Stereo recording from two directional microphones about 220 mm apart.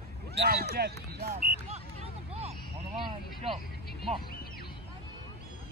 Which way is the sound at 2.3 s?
30° right (ahead or behind).